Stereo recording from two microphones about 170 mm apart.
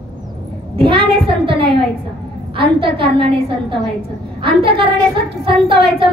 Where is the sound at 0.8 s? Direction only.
30° right (ahead or behind).